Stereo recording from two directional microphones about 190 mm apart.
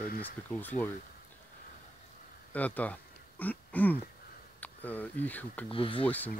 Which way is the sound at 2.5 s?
10° left (ahead or behind).